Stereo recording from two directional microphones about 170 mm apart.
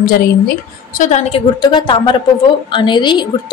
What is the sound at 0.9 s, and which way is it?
A woman's voice, 45° left (ahead or behind).